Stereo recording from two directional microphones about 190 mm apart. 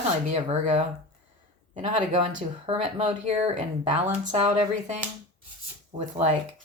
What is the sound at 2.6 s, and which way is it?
Speech, 30° right (ahead or behind).